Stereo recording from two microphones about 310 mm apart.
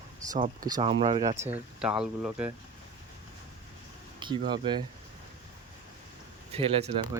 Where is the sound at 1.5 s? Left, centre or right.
Centre.